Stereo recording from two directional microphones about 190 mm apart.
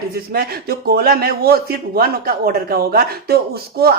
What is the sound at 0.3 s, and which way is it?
A man's voice, 55° right (ahead or behind).